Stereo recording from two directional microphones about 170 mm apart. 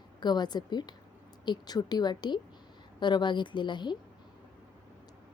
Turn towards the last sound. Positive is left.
turn(degrees=25)  # may be behind; listen again after turning